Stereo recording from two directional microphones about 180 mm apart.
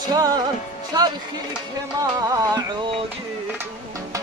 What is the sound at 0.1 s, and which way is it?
Music, 20° right (ahead or behind).